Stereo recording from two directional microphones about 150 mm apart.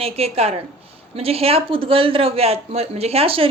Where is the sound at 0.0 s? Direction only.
40° right (ahead or behind).